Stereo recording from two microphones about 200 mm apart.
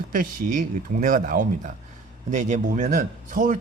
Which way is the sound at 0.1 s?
40° right (ahead or behind).